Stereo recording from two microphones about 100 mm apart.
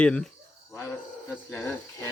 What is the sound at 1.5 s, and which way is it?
Speech, 20° left (ahead or behind).